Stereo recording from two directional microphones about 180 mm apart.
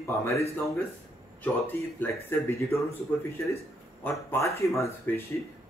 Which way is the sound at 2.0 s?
15° left (ahead or behind).